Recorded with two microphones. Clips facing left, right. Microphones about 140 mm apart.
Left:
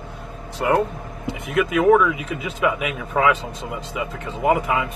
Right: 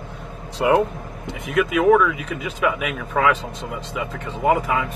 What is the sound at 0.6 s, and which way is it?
Speech, 15° right (ahead or behind).